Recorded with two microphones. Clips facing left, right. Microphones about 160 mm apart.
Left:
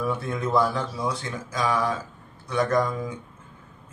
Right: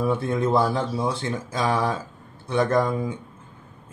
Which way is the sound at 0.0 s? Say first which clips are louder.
Right 5 dB; 30° right (ahead or behind).